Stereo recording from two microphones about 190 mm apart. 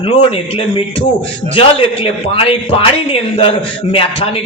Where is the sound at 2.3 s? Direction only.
30° left (ahead or behind).